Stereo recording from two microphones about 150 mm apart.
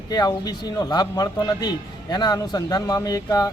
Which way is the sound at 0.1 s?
25° left (ahead or behind).